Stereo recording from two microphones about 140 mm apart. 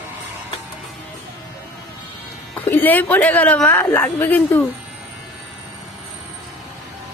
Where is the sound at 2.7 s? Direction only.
10° left (ahead or behind).